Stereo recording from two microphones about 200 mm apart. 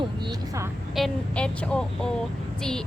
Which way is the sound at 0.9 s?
5° left (ahead or behind).